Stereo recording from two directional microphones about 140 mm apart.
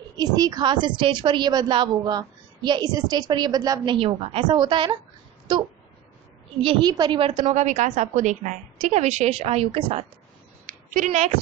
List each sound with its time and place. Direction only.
0.2 s a woman's voice: 30° right (ahead or behind)
7.4 s a woman's voice: 60° right (ahead or behind); by 10.0 s 40° right (ahead or behind)
10.7 s speech: 70° right (ahead or behind)